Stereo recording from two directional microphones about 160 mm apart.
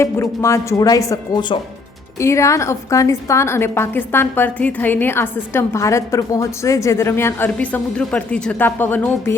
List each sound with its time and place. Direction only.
0.0 s a woman's voice: 20° left (ahead or behind)